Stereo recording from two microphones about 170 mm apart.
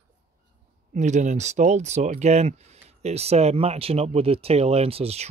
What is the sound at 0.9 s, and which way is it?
Speech, 45° right (ahead or behind).